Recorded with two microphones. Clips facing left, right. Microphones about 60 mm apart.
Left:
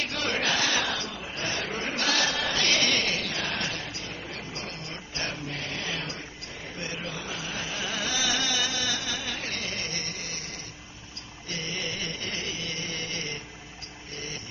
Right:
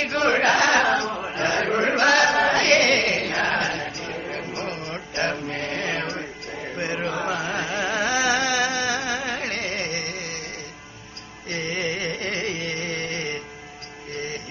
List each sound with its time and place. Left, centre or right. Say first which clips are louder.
0.0 s chant: right 9 dB; right
7.7 s carnatic music: right 8 dB; right
11.4 s carnatic music: right 7 dB; right